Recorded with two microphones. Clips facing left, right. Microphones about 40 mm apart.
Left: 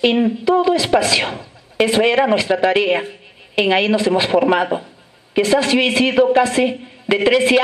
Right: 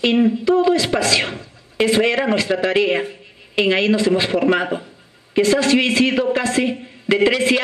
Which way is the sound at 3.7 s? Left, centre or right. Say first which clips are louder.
Left 1 dB; centre.